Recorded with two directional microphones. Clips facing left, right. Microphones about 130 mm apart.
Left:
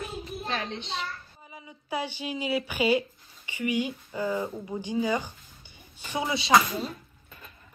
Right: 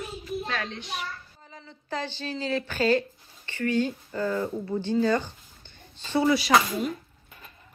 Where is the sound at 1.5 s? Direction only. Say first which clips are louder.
Left 1 dB; 10° left (ahead or behind).